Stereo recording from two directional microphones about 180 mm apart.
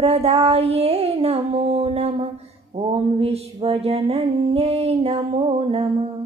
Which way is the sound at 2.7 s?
35° right (ahead or behind).